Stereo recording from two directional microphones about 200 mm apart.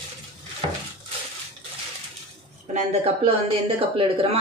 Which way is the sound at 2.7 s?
30° right (ahead or behind).